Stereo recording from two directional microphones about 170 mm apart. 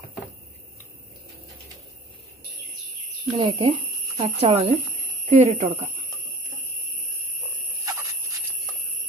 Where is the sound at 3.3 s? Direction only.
30° right (ahead or behind).